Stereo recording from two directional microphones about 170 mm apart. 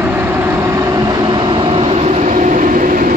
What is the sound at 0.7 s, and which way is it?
Train, 25° right (ahead or behind).